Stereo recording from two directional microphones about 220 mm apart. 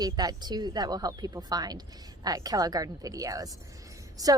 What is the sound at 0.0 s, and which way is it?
A woman's voice, 15° right (ahead or behind).